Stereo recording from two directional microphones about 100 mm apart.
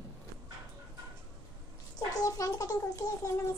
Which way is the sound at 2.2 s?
35° left (ahead or behind).